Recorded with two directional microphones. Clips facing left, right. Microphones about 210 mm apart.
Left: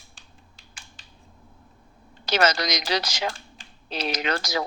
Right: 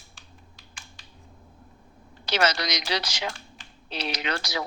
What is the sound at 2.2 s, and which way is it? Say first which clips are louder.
A woman's voice: left 3 dB; 45° left (ahead or behind).